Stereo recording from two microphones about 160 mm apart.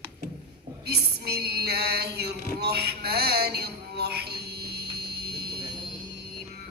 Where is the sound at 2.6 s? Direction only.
90° right.